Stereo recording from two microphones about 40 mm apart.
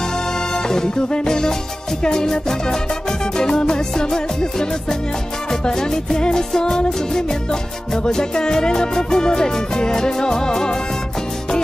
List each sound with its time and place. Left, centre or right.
0.6 s music: centre